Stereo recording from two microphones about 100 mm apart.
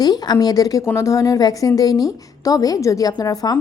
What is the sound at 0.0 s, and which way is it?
A woman's voice, 40° left (ahead or behind).